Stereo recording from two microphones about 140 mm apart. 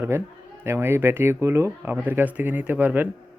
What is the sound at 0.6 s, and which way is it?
Speech, 15° right (ahead or behind).